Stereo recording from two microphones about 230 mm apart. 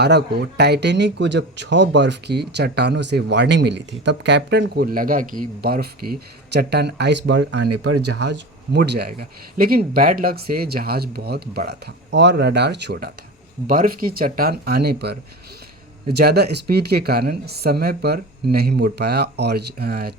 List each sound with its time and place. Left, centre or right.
0.0 s speech: right